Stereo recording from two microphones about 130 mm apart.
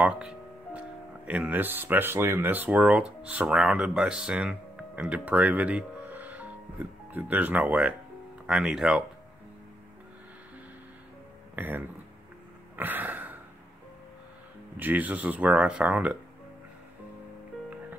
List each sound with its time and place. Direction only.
0.0 s speech: 10° right (ahead or behind)
11.5 s speech: 15° right (ahead or behind)
12.7 s a sound: 15° right (ahead or behind)
14.8 s speech: 15° right (ahead or behind)